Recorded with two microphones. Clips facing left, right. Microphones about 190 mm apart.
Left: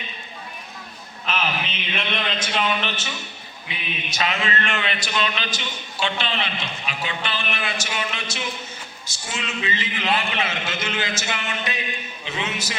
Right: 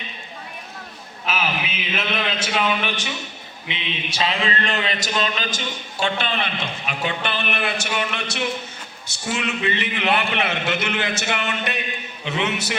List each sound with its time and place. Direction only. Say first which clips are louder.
1.3 s a man's voice: right 1 dB; 5° right (ahead or behind)
3.7 s a sound: right 3 dB; 25° right (ahead or behind); by 8.4 s 60° right (ahead or behind)
9.1 s a man's voice: right 5 dB; 60° right (ahead or behind)